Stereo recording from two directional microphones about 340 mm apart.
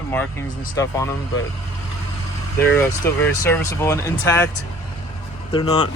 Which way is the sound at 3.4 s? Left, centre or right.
Centre.